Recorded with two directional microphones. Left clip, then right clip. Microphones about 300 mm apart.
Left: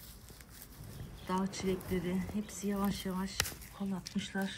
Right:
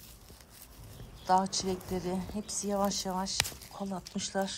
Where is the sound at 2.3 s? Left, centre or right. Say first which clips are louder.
Right 1 dB; centre.